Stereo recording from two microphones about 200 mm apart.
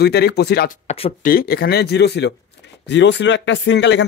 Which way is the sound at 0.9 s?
35° left (ahead or behind).